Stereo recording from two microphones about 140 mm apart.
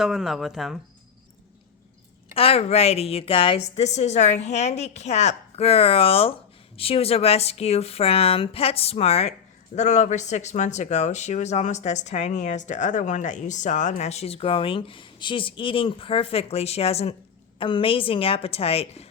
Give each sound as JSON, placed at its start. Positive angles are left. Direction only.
{"t": 0.0, "sound": "speech", "side_deg": -5}
{"t": 2.3, "sound": "a woman's voice", "side_deg": 45}